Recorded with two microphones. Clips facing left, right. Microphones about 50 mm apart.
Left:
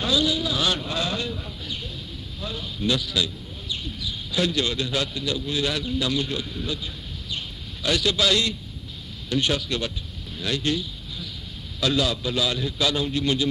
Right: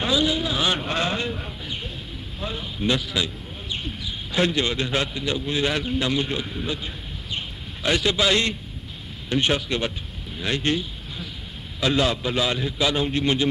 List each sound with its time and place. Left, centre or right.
0.0 s vehicle: right
0.8 s sheep: right
2.4 s a man's voice: right